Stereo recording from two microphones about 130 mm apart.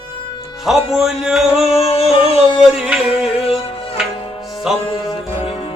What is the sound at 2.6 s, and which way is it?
Music, 5° right (ahead or behind).